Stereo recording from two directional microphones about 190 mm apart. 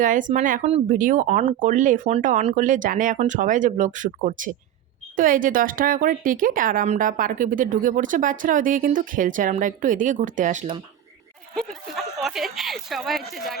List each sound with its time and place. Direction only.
0.0 s speech: 45° right (ahead or behind)
11.5 s speech: centre (ahead or behind)